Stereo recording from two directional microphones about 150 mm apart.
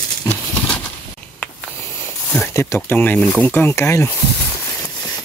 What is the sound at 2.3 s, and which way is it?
Speech, 15° left (ahead or behind).